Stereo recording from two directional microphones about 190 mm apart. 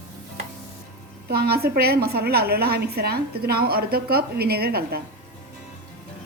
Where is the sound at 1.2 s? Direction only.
55° right (ahead or behind).